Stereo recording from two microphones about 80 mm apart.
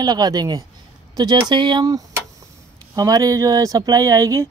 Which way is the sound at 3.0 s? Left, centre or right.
Right.